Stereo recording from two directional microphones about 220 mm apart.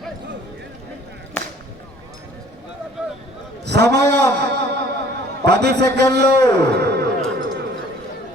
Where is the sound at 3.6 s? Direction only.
50° right (ahead or behind).